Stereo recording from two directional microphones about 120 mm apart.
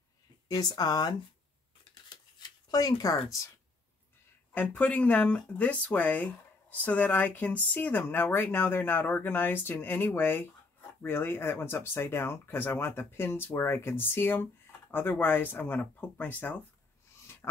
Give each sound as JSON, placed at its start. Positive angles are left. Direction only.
{"t": 0.5, "sound": "speech", "side_deg": 30}
{"t": 2.7, "sound": "speech", "side_deg": 30}
{"t": 4.6, "sound": "speech", "side_deg": 10}